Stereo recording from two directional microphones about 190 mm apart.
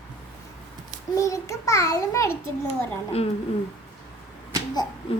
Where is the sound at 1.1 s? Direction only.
15° left (ahead or behind).